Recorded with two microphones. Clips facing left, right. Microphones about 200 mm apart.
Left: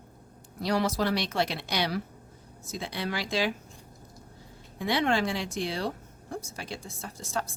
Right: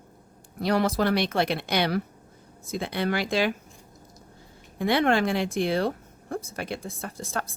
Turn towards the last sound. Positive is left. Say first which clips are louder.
# right 2 dB
turn(degrees=-55)  # may be behind; listen again after turning